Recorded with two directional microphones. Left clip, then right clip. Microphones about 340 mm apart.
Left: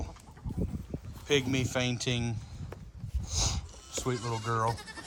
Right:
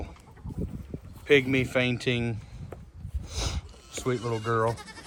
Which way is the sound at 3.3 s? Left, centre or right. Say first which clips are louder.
Left 2 dB; centre.